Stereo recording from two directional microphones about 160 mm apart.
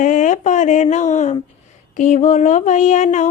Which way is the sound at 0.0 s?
50° left (ahead or behind).